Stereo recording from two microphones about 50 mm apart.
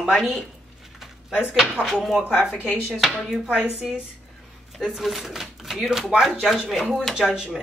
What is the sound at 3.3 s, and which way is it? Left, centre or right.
Speech, centre.